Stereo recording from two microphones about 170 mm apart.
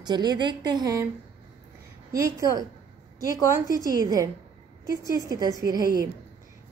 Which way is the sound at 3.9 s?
20° right (ahead or behind).